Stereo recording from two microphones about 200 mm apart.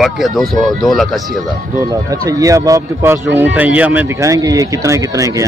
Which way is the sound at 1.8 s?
15° right (ahead or behind).